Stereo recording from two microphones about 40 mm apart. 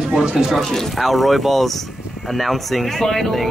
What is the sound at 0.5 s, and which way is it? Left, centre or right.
Speech, centre.